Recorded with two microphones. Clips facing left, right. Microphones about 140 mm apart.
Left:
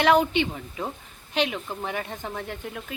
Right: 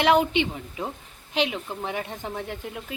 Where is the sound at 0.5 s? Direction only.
15° right (ahead or behind).